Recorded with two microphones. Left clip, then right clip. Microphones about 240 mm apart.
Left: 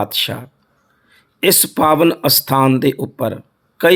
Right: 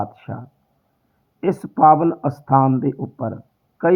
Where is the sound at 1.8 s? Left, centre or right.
Left.